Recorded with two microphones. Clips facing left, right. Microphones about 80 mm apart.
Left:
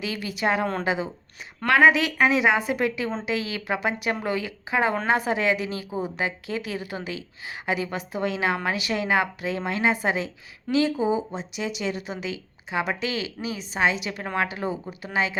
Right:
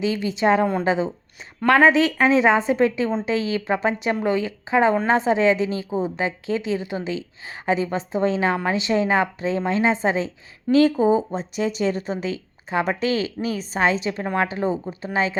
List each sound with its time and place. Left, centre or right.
0.0 s a woman's voice: right
10.8 s speech: right